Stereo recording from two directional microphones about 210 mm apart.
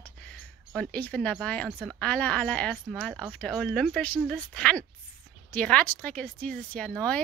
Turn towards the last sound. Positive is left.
turn(degrees=5)  # may be behind; listen again after turning